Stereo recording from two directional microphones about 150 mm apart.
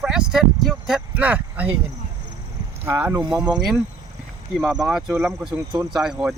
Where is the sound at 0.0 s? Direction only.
5° right (ahead or behind).